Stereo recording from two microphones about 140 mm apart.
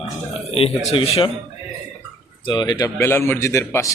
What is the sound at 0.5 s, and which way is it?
Speech, 45° left (ahead or behind).